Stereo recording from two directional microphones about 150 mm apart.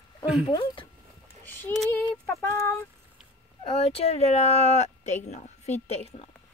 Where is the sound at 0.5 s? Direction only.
30° left (ahead or behind).